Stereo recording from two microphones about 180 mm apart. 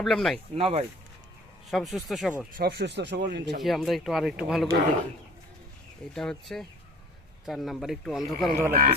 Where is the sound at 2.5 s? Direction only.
65° right (ahead or behind).